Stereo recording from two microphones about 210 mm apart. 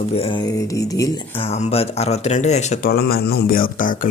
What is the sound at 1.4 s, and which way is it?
Speech, 30° left (ahead or behind).